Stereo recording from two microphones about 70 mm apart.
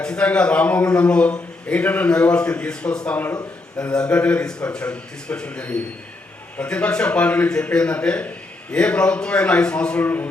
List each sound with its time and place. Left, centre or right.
0.0 s a man's voice: centre